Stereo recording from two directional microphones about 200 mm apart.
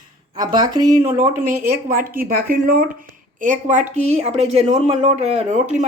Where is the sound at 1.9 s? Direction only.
45° right (ahead or behind).